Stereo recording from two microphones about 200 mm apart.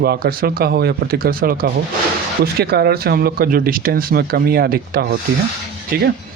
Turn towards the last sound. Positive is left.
turn(degrees=-50)  # may be behind; listen again after turning